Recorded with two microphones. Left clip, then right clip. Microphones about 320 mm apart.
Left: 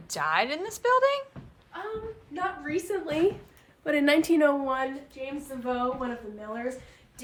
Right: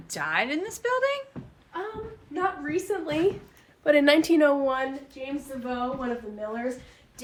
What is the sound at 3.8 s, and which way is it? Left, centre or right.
A woman's voice, centre.